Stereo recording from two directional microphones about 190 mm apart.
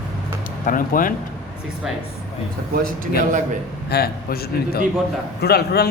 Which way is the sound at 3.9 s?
55° left (ahead or behind).